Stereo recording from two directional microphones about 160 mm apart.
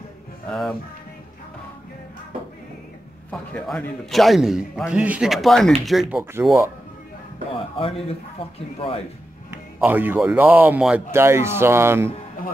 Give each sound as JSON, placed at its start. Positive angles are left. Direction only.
{"t": 0.5, "sound": "a man's voice", "side_deg": 5}
{"t": 3.3, "sound": "a man's voice", "side_deg": 5}
{"t": 6.4, "sound": "speech", "side_deg": -15}
{"t": 7.5, "sound": "a man's voice", "side_deg": 35}
{"t": 9.8, "sound": "speech", "side_deg": -10}